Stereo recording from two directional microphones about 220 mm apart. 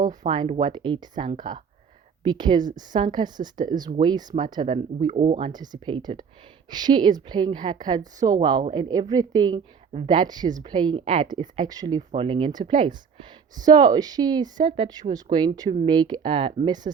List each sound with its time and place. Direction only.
0.1 s a woman's voice: 20° right (ahead or behind)
5.5 s a woman's voice: 20° right (ahead or behind)
13.6 s a woman's voice: 20° right (ahead or behind)